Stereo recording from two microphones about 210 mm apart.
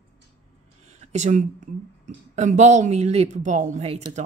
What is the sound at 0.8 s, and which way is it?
Speech, 30° right (ahead or behind).